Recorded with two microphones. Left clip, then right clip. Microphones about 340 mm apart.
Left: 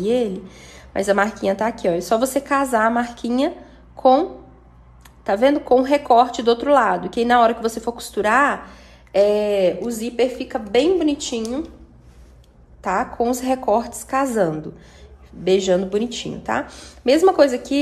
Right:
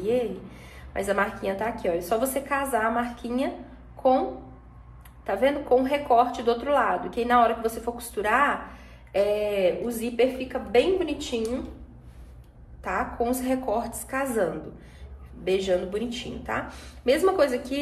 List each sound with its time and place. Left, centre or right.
0.9 s a woman's voice: left
5.2 s a woman's voice: left
12.8 s a woman's voice: left